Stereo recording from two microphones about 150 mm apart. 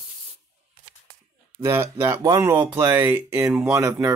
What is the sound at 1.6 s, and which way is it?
Speech, 15° right (ahead or behind).